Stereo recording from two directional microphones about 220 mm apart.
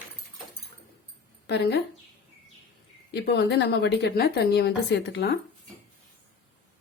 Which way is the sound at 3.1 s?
50° left (ahead or behind).